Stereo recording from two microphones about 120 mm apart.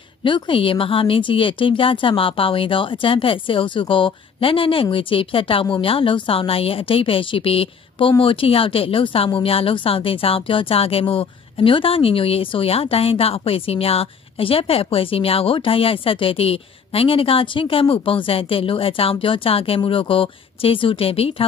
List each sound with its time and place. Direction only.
0.2 s speech: 45° left (ahead or behind)